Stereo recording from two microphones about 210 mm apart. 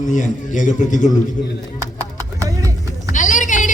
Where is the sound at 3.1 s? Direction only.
35° left (ahead or behind).